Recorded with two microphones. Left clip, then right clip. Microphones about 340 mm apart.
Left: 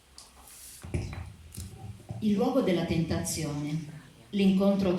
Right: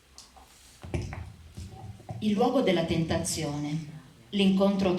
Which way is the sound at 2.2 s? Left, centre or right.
Right.